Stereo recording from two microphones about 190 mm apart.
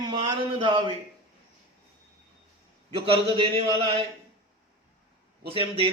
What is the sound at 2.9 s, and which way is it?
A man's voice, 30° right (ahead or behind).